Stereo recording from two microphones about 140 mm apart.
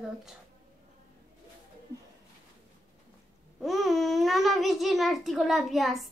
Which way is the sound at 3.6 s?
Centre (ahead or behind).